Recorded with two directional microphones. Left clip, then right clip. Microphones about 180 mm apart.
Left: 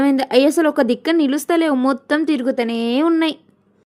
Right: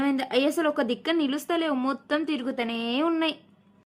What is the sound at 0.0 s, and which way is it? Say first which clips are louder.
Speech: left 10 dB; 35° left (ahead or behind).